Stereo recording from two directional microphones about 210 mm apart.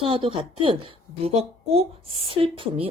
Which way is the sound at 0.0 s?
25° right (ahead or behind).